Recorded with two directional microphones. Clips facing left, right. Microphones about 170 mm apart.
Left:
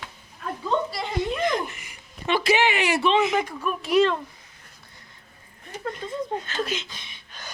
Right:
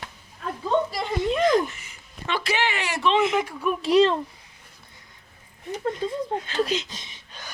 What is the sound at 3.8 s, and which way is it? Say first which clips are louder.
Speech: right 2 dB; 30° right (ahead or behind).